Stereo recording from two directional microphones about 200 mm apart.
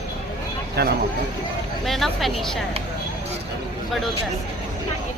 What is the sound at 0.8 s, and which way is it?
Speech, 55° right (ahead or behind).